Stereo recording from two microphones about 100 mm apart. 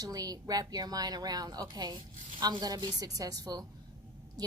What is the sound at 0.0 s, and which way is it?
A woman's voice, 40° right (ahead or behind).